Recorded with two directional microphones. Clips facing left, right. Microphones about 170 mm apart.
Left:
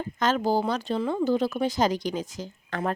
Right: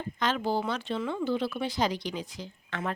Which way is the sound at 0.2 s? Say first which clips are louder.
Left 5 dB; 40° left (ahead or behind).